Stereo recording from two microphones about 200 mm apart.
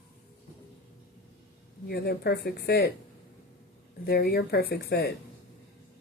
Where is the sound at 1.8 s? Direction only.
55° left (ahead or behind).